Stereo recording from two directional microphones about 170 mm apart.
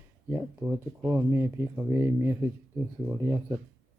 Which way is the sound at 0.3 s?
15° right (ahead or behind).